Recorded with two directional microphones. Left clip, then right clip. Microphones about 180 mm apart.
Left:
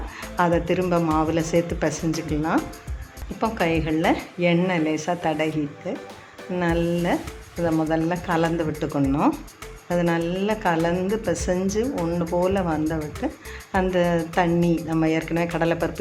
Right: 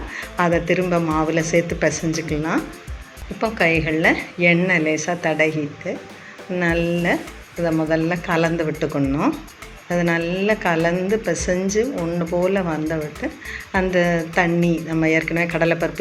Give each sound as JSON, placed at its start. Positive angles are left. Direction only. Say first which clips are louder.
{"t": 0.3, "sound": "a woman's voice", "louder": "right 2 dB", "side_deg": 20}